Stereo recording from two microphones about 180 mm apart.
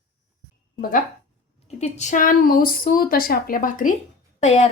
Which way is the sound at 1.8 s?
40° left (ahead or behind).